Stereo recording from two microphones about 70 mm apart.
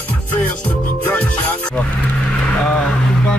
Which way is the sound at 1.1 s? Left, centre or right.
Centre.